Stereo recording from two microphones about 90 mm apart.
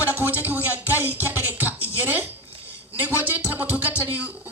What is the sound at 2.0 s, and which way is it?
Speech, 20° right (ahead or behind).